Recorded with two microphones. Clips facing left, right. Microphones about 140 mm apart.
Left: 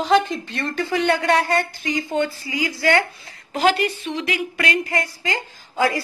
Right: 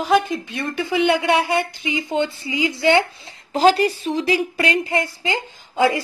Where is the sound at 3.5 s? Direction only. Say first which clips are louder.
Right 4 dB; 35° right (ahead or behind).